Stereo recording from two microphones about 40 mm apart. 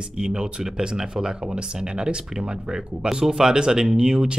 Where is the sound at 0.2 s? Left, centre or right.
Right.